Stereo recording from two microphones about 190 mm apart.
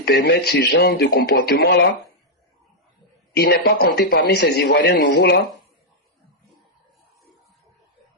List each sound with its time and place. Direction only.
0.0 s a man's voice: 55° left (ahead or behind)
3.3 s a man's voice: 55° left (ahead or behind)